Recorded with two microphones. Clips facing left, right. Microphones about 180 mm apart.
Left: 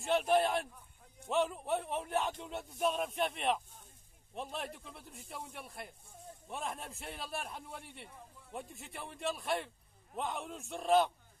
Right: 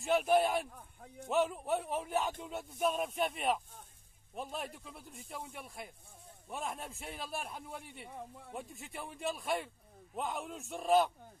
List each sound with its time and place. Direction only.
0.0 s speech: centre (ahead or behind)
0.7 s a sound: 60° right (ahead or behind)
1.3 s speech: centre (ahead or behind)
8.1 s speech: 65° right (ahead or behind)
8.5 s speech: centre (ahead or behind)